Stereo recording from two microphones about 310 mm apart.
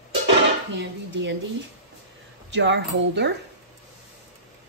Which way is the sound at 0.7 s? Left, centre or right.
Right.